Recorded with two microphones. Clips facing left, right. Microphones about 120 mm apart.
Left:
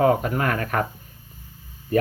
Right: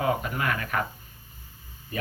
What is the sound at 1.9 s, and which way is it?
Speech, 50° left (ahead or behind).